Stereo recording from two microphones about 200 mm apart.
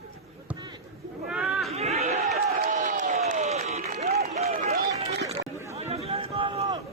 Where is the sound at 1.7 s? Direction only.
30° right (ahead or behind).